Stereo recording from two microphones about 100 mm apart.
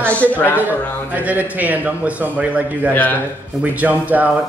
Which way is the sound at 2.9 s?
20° left (ahead or behind).